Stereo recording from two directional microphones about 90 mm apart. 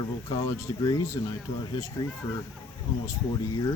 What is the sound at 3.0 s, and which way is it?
Speech, 35° left (ahead or behind).